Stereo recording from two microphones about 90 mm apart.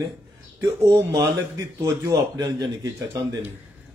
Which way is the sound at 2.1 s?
50° right (ahead or behind).